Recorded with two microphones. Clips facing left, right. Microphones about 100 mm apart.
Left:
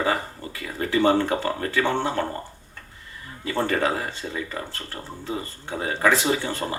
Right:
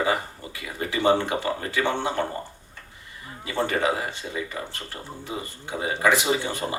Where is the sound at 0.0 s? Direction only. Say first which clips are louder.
Even; 15° right (ahead or behind).